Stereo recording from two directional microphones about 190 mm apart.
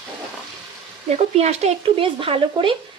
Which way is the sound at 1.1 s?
35° right (ahead or behind).